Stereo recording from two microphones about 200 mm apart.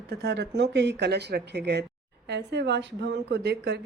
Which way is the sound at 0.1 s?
55° right (ahead or behind).